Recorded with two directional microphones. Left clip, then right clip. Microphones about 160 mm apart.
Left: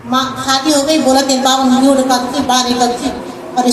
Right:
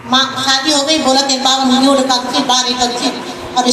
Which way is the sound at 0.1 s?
70° left (ahead or behind).